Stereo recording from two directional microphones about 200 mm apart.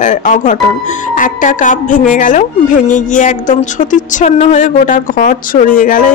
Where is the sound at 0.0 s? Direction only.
40° left (ahead or behind).